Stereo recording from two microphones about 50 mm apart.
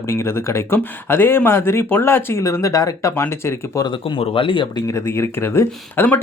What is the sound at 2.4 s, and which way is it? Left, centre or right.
Speech, left.